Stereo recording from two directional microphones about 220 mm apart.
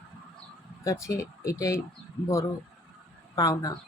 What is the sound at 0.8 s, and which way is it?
Speech, 15° left (ahead or behind).